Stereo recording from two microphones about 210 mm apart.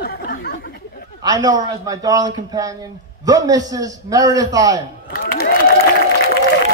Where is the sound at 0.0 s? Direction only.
50° left (ahead or behind).